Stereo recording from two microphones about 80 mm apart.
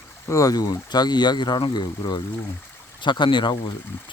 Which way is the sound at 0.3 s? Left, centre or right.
Left.